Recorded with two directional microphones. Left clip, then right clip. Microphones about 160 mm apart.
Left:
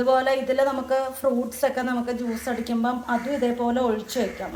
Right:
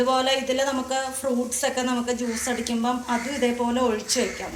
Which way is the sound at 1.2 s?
35° left (ahead or behind).